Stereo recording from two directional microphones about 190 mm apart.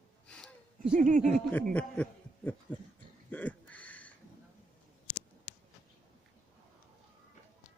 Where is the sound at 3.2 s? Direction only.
10° left (ahead or behind).